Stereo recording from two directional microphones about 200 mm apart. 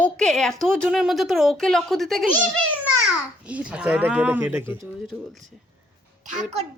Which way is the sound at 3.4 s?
5° right (ahead or behind).